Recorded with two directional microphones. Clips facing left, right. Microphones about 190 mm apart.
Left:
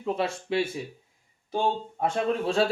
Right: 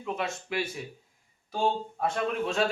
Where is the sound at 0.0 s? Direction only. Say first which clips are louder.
Left 5 dB; 30° left (ahead or behind).